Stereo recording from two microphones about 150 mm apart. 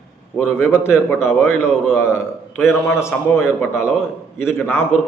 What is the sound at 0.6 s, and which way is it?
A man's voice, 15° left (ahead or behind).